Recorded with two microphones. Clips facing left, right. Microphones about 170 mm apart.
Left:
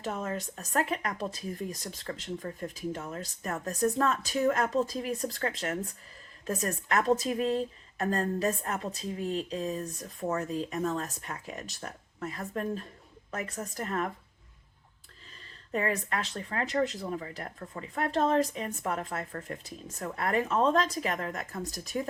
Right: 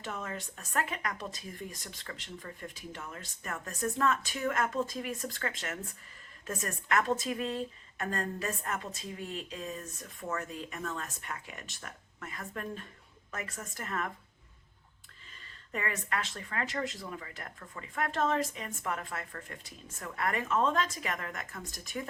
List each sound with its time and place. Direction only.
0.0 s a woman's voice: 40° left (ahead or behind)
15.7 s a woman's voice: 35° left (ahead or behind)